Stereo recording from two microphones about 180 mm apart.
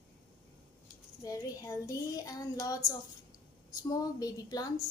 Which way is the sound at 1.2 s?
20° left (ahead or behind).